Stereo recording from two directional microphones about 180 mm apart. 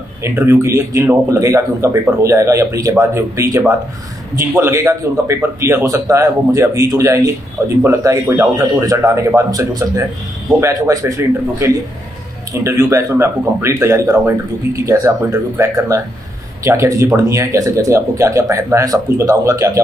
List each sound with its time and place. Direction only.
0.2 s a man's voice: 15° right (ahead or behind)